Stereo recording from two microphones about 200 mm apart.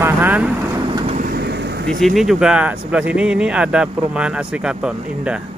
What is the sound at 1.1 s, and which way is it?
Vehicle, 45° right (ahead or behind).